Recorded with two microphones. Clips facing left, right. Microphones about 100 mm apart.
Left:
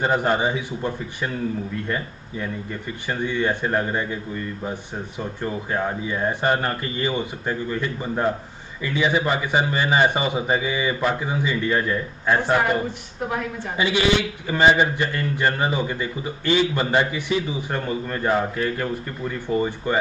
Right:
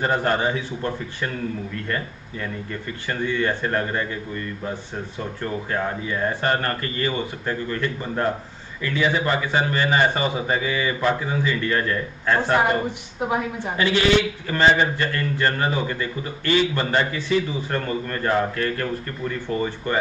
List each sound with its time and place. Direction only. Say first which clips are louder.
0.0 s a man's voice: left 1 dB; 15° left (ahead or behind)
5.4 s a man's voice: left 1 dB; 10° left (ahead or behind)
12.5 s a woman's voice: right 1 dB; 20° right (ahead or behind)
13.7 s a man's voice: right 1 dB; 15° left (ahead or behind)